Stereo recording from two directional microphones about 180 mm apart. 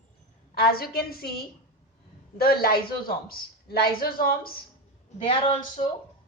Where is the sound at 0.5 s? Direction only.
60° left (ahead or behind).